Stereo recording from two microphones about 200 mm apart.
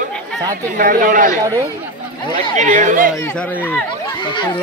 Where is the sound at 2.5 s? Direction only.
40° right (ahead or behind).